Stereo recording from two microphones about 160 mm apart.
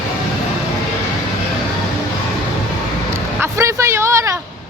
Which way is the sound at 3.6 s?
20° right (ahead or behind).